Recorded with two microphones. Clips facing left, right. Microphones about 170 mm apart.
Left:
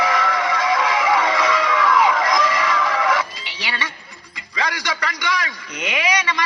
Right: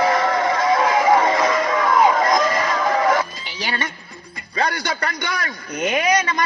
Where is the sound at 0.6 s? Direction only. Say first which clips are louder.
Right 3 dB; 50° right (ahead or behind).